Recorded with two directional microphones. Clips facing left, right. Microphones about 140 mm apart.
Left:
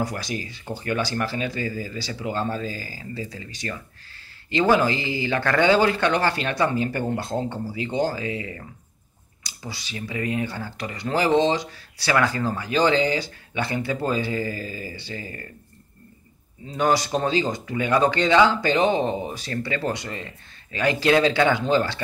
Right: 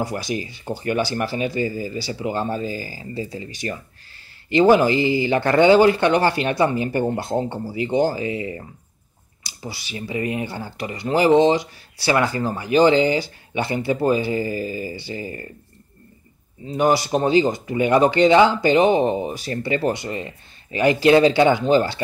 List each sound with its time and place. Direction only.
0.2 s speech: 15° right (ahead or behind)
9.9 s speech: 25° right (ahead or behind)
16.7 s speech: 10° right (ahead or behind)